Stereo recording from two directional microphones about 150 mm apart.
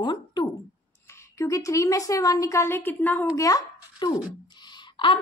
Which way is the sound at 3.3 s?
25° left (ahead or behind).